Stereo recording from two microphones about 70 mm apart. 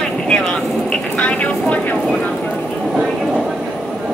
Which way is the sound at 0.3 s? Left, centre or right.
Centre.